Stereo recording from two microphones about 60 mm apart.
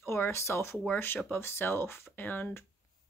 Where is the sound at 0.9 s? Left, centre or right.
Left.